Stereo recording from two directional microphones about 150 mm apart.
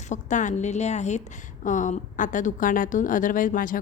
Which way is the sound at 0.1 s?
55° left (ahead or behind).